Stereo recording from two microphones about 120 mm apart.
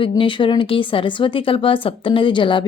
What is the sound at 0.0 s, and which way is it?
Speech, 45° left (ahead or behind).